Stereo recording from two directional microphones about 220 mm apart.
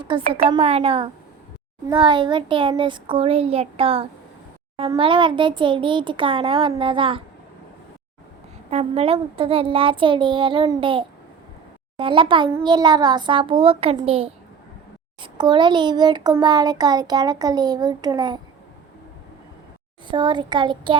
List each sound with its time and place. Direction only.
0.0 s a child's voice: 20° right (ahead or behind)
8.7 s a child's voice: 30° right (ahead or behind)
20.1 s a child's voice: 20° right (ahead or behind)